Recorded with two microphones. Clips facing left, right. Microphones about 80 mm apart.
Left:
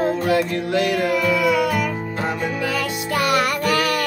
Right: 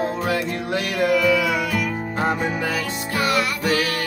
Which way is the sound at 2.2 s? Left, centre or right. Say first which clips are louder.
Right 2 dB; centre.